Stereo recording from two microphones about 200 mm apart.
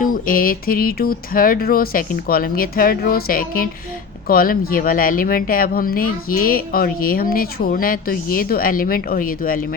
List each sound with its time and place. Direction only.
0.0 s speech: 45° left (ahead or behind)